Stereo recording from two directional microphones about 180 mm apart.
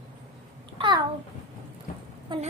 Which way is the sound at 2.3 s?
25° right (ahead or behind).